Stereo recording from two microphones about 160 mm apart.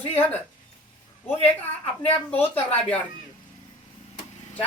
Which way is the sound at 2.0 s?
10° left (ahead or behind).